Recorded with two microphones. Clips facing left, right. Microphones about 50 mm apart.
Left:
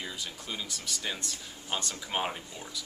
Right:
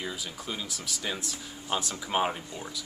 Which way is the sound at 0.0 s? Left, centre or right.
Centre.